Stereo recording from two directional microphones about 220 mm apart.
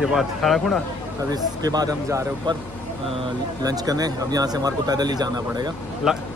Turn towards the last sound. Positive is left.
turn(degrees=0)  # may be behind; listen again after turning